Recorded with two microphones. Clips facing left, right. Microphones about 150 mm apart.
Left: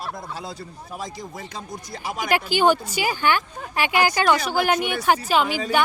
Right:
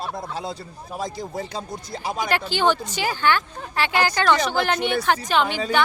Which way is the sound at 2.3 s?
10° left (ahead or behind).